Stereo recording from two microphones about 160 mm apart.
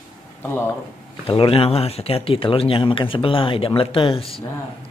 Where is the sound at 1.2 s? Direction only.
35° left (ahead or behind).